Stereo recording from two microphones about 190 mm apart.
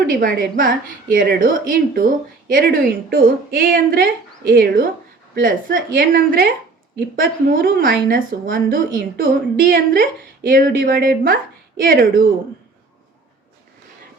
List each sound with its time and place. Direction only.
0.0 s speech: 50° right (ahead or behind)